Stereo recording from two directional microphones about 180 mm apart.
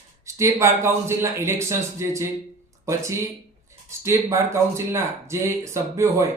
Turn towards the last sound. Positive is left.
turn(degrees=-15)  # may be behind; listen again after turning